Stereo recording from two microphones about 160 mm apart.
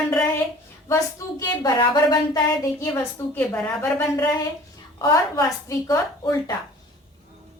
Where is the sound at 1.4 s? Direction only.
25° left (ahead or behind).